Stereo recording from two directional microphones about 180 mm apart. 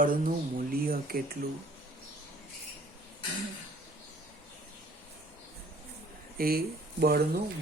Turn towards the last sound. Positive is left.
turn(degrees=-60)  # may be behind; listen again after turning